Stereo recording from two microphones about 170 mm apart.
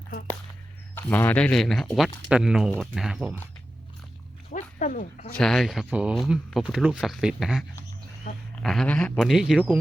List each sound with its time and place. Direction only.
0.9 s speech: 10° left (ahead or behind)
4.5 s a sound: 50° left (ahead or behind)
5.4 s speech: centre (ahead or behind)
8.3 s speech: 55° left (ahead or behind)
8.6 s speech: centre (ahead or behind)